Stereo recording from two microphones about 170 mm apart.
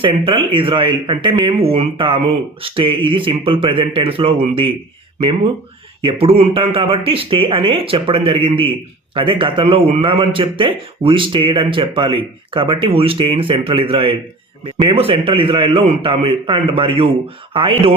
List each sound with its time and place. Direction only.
0.0 s a man's voice: 30° right (ahead or behind)
6.0 s a man's voice: 35° right (ahead or behind)